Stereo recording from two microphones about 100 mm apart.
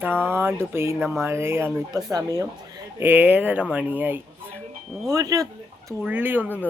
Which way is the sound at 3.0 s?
20° right (ahead or behind).